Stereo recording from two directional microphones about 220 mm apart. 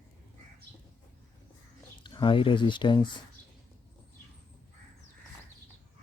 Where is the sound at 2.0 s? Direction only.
20° left (ahead or behind).